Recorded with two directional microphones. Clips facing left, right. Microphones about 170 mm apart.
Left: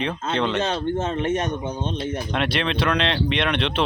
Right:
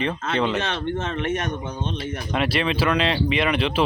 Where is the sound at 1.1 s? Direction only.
20° left (ahead or behind).